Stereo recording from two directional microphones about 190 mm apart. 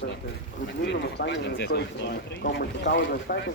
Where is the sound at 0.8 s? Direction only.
65° left (ahead or behind).